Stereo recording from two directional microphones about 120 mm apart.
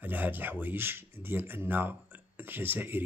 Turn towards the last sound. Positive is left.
turn(degrees=-15)  # may be behind; listen again after turning